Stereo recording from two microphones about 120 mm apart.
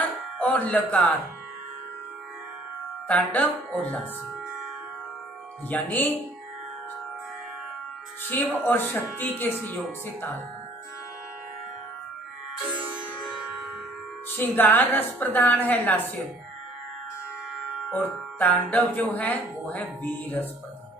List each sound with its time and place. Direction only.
0.4 s speech: 10° left (ahead or behind)
3.3 s speech: 10° left (ahead or behind)
5.7 s speech: 15° left (ahead or behind)
8.3 s speech: 15° left (ahead or behind)
12.7 s music: 10° right (ahead or behind)
14.3 s speech: 15° left (ahead or behind)
17.8 s speech: 15° left (ahead or behind)